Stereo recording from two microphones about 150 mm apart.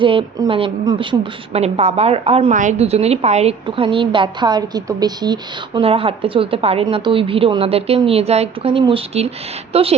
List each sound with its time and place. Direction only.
0.0 s a woman's voice: 35° right (ahead or behind)
3.7 s a woman's voice: 35° right (ahead or behind)
5.8 s a woman's voice: 40° right (ahead or behind)